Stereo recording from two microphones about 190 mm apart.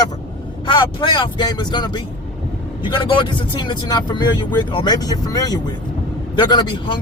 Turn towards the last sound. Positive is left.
turn(degrees=25)  # may be behind; listen again after turning